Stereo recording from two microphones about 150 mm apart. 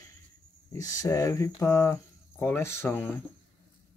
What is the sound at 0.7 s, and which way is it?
Speech, 20° left (ahead or behind).